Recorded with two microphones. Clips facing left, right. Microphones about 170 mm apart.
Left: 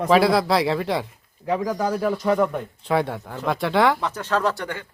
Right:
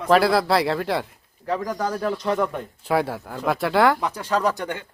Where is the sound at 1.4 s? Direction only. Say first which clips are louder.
Left 2 dB; 10° left (ahead or behind).